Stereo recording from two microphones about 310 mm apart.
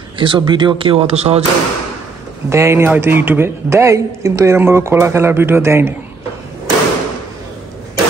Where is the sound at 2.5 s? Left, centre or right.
Centre.